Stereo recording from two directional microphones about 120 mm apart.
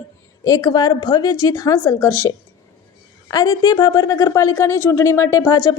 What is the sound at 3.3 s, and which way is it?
Speech, 35° left (ahead or behind).